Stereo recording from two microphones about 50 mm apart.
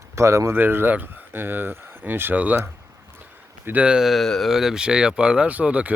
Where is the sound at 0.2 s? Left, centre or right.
Right.